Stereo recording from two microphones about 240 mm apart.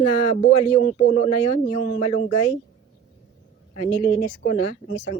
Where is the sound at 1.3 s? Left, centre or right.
Left.